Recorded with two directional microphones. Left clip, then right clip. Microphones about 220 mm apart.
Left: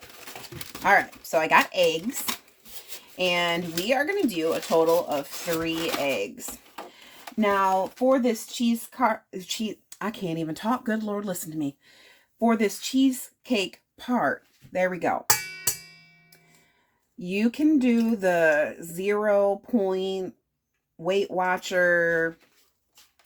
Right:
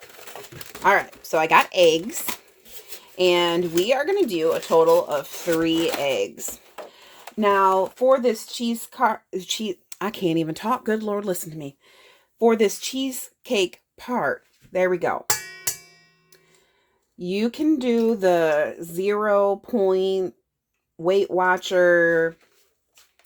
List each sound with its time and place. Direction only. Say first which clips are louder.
0.8 s speech: right 2 dB; 40° right (ahead or behind)
3.2 s speech: right 5 dB; 40° right (ahead or behind)
17.2 s speech: right 2 dB; 35° right (ahead or behind)